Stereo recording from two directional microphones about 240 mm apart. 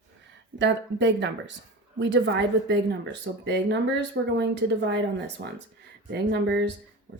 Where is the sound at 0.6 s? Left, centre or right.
Right.